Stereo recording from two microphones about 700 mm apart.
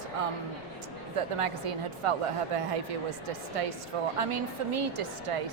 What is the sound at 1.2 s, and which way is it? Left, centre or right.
A woman's voice, right.